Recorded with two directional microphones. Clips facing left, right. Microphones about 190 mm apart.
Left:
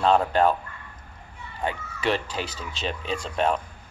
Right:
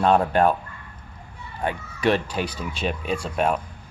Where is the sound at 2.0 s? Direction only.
15° right (ahead or behind).